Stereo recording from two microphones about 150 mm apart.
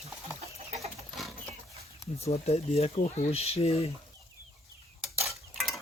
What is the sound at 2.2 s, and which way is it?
Speech, 45° left (ahead or behind).